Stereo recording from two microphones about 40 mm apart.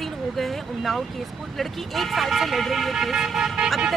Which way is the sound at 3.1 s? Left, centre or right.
Centre.